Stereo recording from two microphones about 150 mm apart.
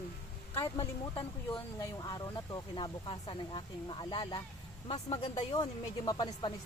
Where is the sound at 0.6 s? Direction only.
20° left (ahead or behind); by 5.4 s 45° left (ahead or behind).